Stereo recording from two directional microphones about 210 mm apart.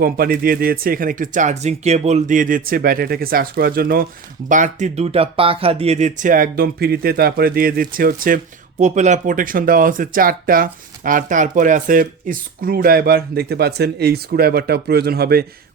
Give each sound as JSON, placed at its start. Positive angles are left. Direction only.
{"t": 0.0, "sound": "speech", "side_deg": -45}